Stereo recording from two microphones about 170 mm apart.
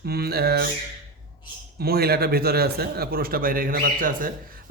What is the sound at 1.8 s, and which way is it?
Speech, 65° right (ahead or behind).